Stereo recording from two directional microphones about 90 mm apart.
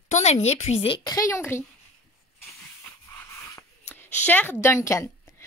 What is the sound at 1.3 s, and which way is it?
Speech, 30° left (ahead or behind).